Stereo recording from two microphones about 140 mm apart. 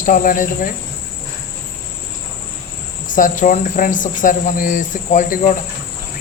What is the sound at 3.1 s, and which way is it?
Speech, 65° left (ahead or behind).